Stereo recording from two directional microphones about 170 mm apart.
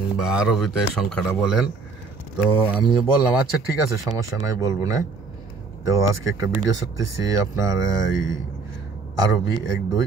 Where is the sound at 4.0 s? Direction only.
20° right (ahead or behind).